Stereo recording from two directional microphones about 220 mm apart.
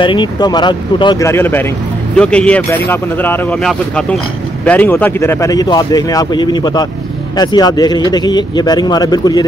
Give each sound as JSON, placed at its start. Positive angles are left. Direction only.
{"t": 0.0, "sound": "speech", "side_deg": 20}